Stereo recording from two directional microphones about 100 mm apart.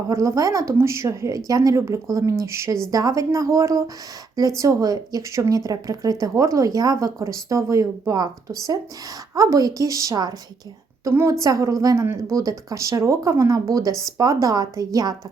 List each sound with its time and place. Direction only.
0.1 s speech: 30° right (ahead or behind)
11.0 s speech: 25° right (ahead or behind)